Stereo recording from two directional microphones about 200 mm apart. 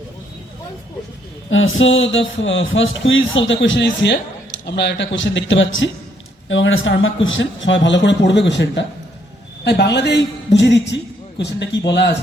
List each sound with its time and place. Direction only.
1.5 s a man's voice: 75° left (ahead or behind); by 12.1 s 60° left (ahead or behind)